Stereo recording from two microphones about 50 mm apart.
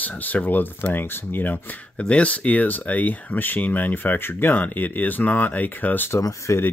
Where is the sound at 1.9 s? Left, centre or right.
Left.